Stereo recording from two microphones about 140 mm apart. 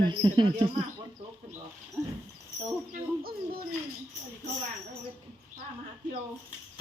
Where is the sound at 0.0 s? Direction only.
30° right (ahead or behind).